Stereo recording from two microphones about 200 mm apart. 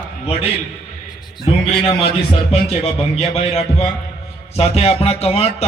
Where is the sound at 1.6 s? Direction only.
30° left (ahead or behind).